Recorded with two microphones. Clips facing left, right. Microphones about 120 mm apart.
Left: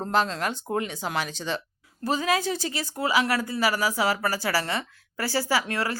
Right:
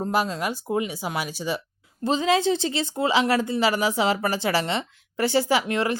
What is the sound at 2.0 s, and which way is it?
Speech, 25° right (ahead or behind).